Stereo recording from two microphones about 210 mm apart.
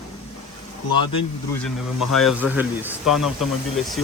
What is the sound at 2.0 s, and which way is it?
Speech, centre (ahead or behind).